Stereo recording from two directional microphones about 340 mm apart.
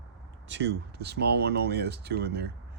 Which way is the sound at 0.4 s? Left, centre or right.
Right.